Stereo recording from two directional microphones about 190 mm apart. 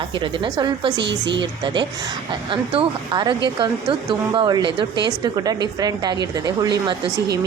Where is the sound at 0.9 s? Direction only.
65° right (ahead or behind).